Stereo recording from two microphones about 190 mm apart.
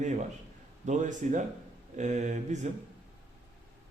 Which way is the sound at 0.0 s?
40° right (ahead or behind).